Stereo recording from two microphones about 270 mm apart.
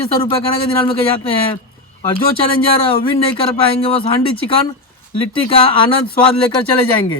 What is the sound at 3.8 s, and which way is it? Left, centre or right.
Speech, centre.